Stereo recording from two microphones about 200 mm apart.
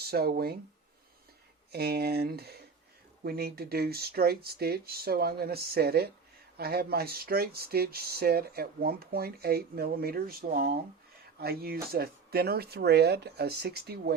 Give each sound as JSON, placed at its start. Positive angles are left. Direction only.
{"t": 0.0, "sound": "speech", "side_deg": -50}
{"t": 1.7, "sound": "speech", "side_deg": -50}